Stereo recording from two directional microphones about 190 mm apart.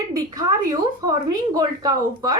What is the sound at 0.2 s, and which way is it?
A woman's voice, 20° right (ahead or behind).